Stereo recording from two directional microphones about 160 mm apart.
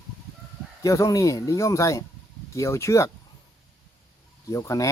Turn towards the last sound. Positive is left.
turn(degrees=20)  # may be behind; listen again after turning